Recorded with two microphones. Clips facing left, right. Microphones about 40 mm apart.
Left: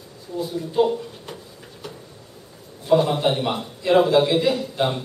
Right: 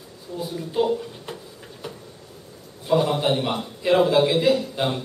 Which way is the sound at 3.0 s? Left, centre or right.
Centre.